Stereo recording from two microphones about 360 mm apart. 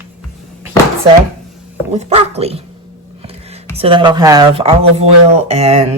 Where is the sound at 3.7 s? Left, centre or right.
Centre.